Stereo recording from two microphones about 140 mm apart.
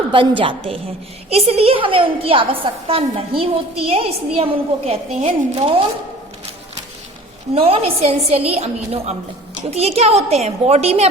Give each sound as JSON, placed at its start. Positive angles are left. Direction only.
{"t": 0.1, "sound": "a woman's voice", "side_deg": -40}
{"t": 7.5, "sound": "a woman's voice", "side_deg": -45}